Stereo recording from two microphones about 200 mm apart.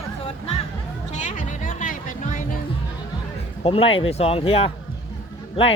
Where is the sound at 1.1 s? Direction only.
35° left (ahead or behind).